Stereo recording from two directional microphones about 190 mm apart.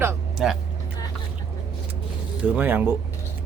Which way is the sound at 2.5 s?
10° right (ahead or behind).